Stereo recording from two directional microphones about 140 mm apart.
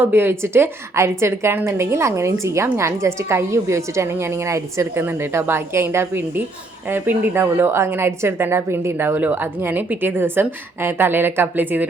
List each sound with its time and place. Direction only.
0.0 s a woman's voice: 15° right (ahead or behind)